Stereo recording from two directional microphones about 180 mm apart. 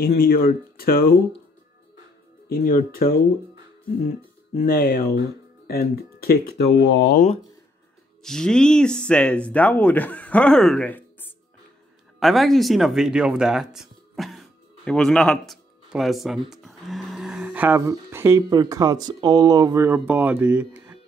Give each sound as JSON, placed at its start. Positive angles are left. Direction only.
{"t": 0.2, "sound": "speech", "side_deg": 55}
{"t": 2.5, "sound": "speech", "side_deg": 55}
{"t": 4.6, "sound": "speech", "side_deg": 55}
{"t": 8.2, "sound": "speech", "side_deg": 5}